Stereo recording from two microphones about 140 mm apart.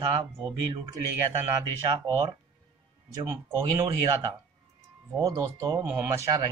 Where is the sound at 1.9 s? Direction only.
35° right (ahead or behind).